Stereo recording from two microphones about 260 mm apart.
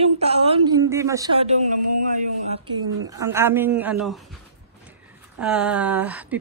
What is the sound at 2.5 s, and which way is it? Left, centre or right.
A woman's voice, centre.